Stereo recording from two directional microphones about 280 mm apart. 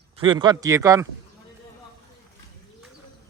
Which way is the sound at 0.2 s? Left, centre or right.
Centre.